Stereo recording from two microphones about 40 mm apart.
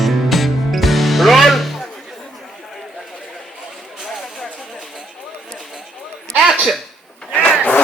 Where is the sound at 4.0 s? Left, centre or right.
Centre.